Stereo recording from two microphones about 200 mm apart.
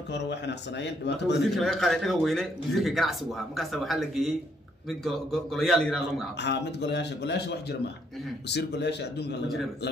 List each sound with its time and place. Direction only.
0.1 s speech: 60° left (ahead or behind)
1.5 s speech: centre (ahead or behind)
6.4 s speech: 60° left (ahead or behind)